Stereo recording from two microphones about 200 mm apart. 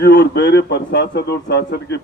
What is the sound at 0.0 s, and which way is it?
A man's voice, 55° left (ahead or behind).